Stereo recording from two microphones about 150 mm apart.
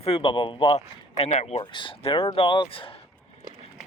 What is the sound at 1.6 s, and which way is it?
Speech, 30° left (ahead or behind).